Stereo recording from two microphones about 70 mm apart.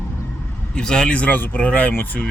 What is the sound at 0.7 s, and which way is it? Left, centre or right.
Speech, centre.